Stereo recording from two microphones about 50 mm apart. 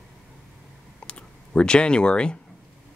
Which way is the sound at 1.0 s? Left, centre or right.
Left.